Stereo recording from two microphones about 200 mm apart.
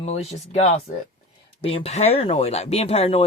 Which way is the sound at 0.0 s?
35° left (ahead or behind).